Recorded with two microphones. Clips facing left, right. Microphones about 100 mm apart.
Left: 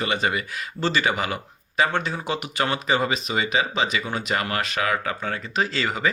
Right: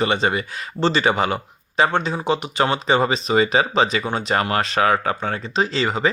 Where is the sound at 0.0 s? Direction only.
30° right (ahead or behind).